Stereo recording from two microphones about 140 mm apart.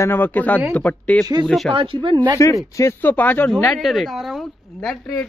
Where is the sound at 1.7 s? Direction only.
40° right (ahead or behind).